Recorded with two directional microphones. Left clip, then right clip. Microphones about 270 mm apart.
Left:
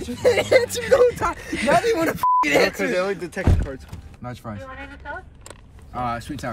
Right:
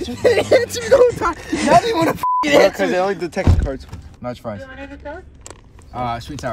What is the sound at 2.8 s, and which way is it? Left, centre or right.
Speech, right.